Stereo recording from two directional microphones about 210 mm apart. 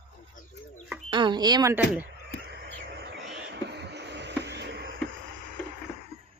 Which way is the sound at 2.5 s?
55° right (ahead or behind).